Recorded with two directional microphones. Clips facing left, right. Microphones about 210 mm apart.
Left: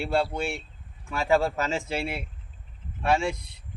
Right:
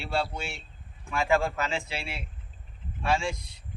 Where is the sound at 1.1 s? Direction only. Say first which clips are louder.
Left 2 dB; 35° left (ahead or behind).